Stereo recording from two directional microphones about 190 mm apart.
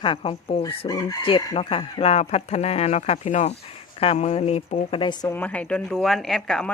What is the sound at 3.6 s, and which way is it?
Speech, 30° left (ahead or behind).